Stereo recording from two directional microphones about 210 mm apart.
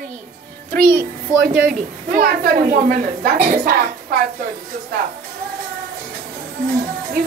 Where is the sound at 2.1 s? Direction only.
40° right (ahead or behind).